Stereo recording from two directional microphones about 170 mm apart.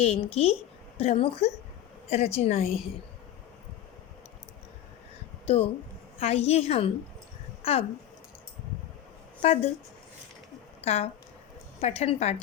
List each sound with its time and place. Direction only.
0.0 s a woman's voice: 35° left (ahead or behind)
5.5 s a woman's voice: 35° left (ahead or behind)
9.4 s speech: 40° left (ahead or behind)
10.8 s a woman's voice: 40° left (ahead or behind)